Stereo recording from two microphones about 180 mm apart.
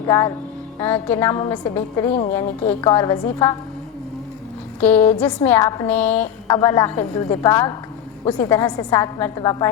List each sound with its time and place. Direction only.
0.1 s a woman's voice: 15° left (ahead or behind)
4.8 s a woman's voice: 10° left (ahead or behind)
6.5 s a woman's voice: 20° left (ahead or behind)